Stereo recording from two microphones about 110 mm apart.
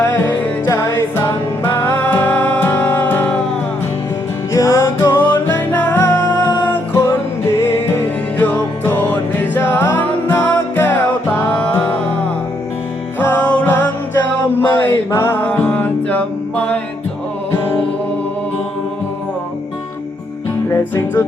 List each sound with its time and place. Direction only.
0.1 s music: 20° left (ahead or behind)
4.5 s music: 25° left (ahead or behind)
13.1 s music: 15° left (ahead or behind)
20.7 s music: 20° left (ahead or behind)